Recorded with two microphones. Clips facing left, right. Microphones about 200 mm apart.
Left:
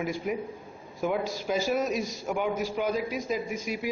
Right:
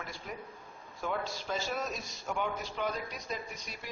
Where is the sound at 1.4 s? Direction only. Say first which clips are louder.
Left 10 dB; 20° left (ahead or behind).